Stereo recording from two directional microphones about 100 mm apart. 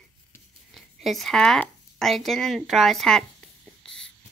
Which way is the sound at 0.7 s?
Centre (ahead or behind).